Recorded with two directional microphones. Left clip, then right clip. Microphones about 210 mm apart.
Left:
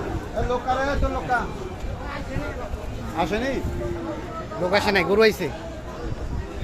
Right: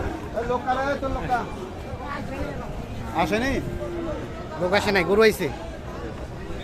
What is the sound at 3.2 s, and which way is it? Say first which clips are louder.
Speech: right 1 dB; 55° right (ahead or behind).